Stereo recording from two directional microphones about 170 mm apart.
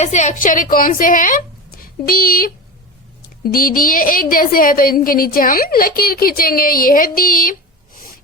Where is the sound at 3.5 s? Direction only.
55° left (ahead or behind).